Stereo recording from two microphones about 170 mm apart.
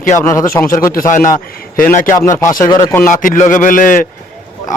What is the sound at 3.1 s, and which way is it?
Speech, 50° left (ahead or behind).